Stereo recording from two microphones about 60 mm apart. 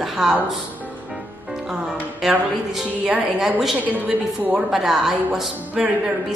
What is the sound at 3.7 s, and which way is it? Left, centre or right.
Speech, right.